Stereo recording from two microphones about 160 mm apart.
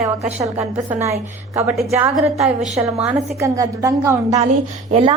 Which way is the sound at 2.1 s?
Centre (ahead or behind).